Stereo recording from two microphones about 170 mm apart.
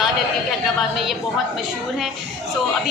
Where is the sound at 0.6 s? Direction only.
Centre (ahead or behind).